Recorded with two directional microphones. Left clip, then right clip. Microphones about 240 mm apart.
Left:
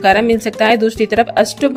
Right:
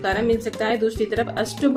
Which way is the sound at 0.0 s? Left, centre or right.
Left.